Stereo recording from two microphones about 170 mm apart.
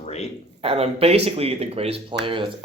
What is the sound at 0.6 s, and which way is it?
Speech, 35° right (ahead or behind).